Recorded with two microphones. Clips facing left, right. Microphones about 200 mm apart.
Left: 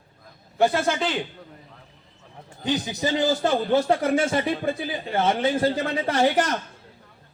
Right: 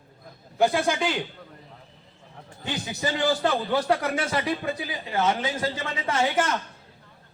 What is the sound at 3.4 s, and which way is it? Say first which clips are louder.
A woman's voice: left 3 dB; 25° left (ahead or behind).